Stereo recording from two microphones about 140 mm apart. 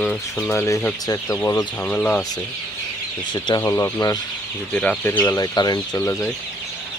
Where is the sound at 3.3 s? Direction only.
30° left (ahead or behind).